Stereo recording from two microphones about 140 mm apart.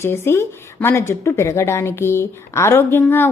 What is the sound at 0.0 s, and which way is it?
A woman's voice, 20° left (ahead or behind).